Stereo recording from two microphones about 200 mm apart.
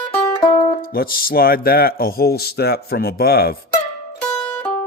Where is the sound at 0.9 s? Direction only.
45° left (ahead or behind).